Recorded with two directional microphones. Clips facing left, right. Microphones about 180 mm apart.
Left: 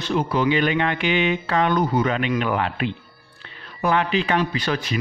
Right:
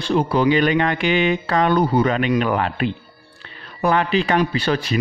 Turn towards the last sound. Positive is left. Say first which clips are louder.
# right 4 dB
turn(degrees=-35)  # may be behind; listen again after turning